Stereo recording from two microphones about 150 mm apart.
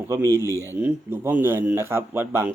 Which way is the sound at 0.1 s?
20° right (ahead or behind).